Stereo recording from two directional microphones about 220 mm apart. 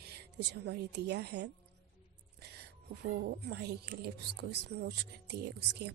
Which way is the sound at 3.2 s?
50° right (ahead or behind).